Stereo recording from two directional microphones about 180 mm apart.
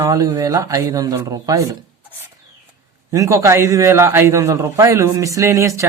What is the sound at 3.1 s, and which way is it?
A man's voice, 15° right (ahead or behind).